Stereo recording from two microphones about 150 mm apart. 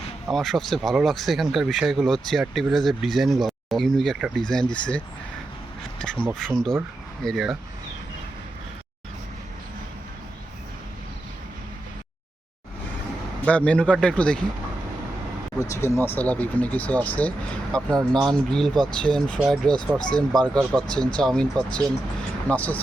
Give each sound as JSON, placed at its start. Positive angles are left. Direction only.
{"t": 0.3, "sound": "speech", "side_deg": 0}
{"t": 13.4, "sound": "speech", "side_deg": 10}
{"t": 15.7, "sound": "speech", "side_deg": 20}